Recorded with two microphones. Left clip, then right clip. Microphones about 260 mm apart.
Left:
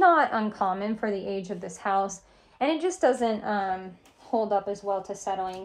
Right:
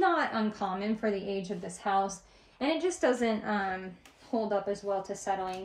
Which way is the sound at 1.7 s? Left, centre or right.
Centre.